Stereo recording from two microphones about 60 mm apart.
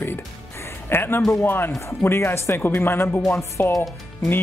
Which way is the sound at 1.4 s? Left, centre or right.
Left.